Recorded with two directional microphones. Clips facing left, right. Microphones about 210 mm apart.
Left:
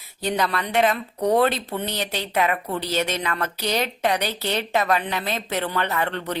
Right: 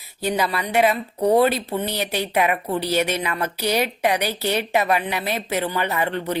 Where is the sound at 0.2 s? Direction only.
5° right (ahead or behind).